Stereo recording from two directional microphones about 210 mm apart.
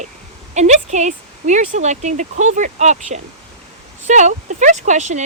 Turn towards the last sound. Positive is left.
turn(degrees=-35)  # may be behind; listen again after turning